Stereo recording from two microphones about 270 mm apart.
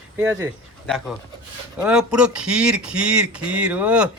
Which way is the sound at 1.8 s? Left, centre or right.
Centre.